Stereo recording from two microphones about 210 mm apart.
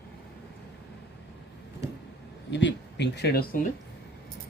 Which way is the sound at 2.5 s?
55° left (ahead or behind).